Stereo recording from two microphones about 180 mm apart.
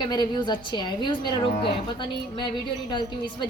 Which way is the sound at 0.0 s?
25° left (ahead or behind).